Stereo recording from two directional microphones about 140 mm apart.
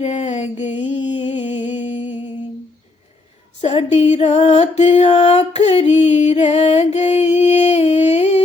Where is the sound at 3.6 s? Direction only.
45° left (ahead or behind).